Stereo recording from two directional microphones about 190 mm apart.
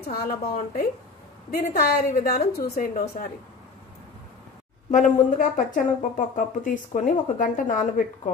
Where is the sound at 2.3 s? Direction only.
40° left (ahead or behind).